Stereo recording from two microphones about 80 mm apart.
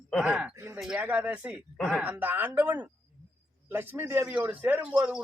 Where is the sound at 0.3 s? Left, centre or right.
Centre; by 4.3 s right.